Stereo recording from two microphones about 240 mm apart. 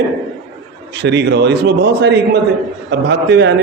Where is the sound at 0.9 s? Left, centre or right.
Right.